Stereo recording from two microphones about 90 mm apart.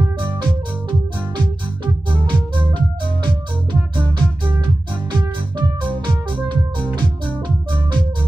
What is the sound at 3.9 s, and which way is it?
Music, 60° right (ahead or behind).